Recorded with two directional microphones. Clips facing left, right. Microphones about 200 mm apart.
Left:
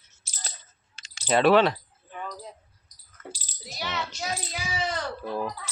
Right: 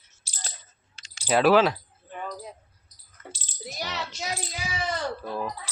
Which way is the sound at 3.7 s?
40° right (ahead or behind).